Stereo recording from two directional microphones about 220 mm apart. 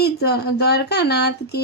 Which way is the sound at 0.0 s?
45° left (ahead or behind).